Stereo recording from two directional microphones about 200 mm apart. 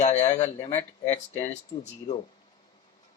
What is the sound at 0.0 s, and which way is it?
Speech, 35° left (ahead or behind).